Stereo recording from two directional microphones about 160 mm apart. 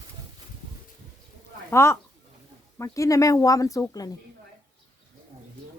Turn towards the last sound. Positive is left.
turn(degrees=20)  # may be behind; listen again after turning